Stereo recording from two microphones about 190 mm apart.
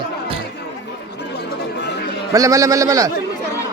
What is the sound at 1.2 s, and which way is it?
Chatter, 60° left (ahead or behind).